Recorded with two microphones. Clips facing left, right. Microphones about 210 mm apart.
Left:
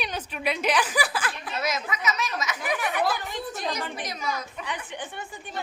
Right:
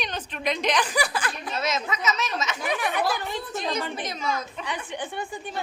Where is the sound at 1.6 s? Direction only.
25° right (ahead or behind).